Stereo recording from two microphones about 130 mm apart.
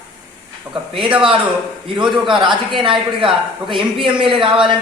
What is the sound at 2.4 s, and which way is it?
A woman's voice, 40° right (ahead or behind).